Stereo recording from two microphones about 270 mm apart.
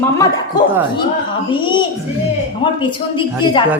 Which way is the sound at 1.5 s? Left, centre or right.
Centre.